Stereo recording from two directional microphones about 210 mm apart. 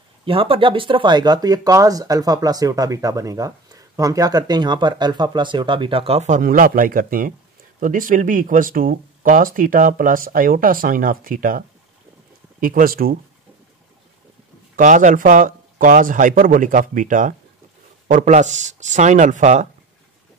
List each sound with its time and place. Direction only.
0.2 s speech: 25° right (ahead or behind); by 13.2 s 45° right (ahead or behind)
14.8 s speech: 35° right (ahead or behind)